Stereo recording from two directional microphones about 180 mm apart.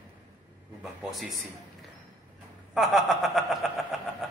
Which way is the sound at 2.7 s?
Centre (ahead or behind).